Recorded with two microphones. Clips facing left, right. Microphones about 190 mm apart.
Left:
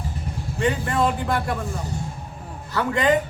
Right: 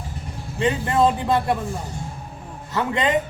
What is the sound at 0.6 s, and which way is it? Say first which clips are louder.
Speech: right 3 dB; 20° right (ahead or behind).